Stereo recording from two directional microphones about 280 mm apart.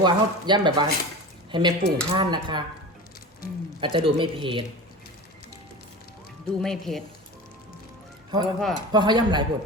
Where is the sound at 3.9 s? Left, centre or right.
Centre.